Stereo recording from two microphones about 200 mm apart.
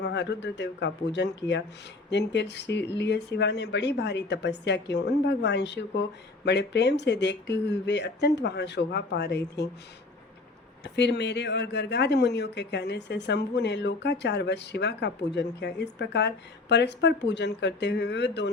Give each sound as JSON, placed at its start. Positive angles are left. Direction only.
{"t": 0.0, "sound": "speech", "side_deg": 60}
{"t": 10.8, "sound": "speech", "side_deg": 60}